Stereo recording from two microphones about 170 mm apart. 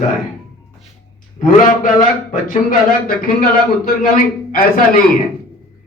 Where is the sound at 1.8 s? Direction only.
50° left (ahead or behind).